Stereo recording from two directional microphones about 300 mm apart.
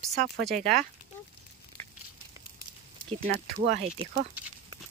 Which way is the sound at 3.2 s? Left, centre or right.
Right.